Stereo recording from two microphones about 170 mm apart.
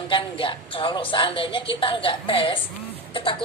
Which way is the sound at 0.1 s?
30° left (ahead or behind).